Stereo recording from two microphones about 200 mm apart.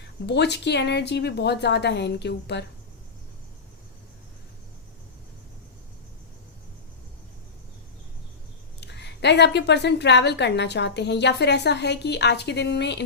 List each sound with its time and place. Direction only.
0.3 s a woman's voice: 60° left (ahead or behind)
8.8 s a woman's voice: 60° left (ahead or behind)